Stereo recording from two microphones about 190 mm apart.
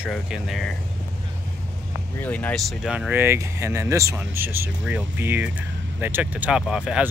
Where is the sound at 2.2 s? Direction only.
10° left (ahead or behind).